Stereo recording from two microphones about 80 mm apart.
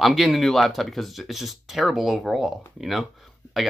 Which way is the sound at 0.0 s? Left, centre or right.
Centre.